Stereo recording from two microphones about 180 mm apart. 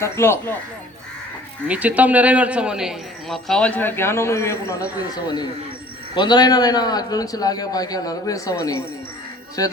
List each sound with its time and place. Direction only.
0.0 s speech: 15° left (ahead or behind)
1.6 s speech: 10° right (ahead or behind); by 4.9 s 15° left (ahead or behind)
6.1 s a man's voice: 25° left (ahead or behind)